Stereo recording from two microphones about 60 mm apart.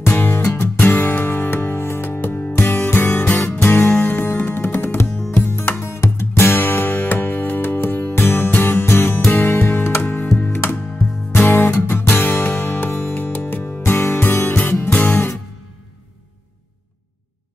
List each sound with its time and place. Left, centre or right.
0.0 s music: left
5.8 s music: left